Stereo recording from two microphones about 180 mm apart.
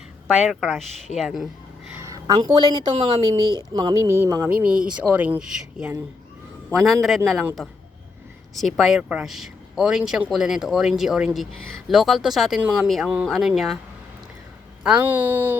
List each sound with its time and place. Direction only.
0.6 s speech: centre (ahead or behind)
1.9 s a woman's voice: 15° right (ahead or behind); by 13.7 s centre (ahead or behind)
14.8 s a woman's voice: 10° right (ahead or behind)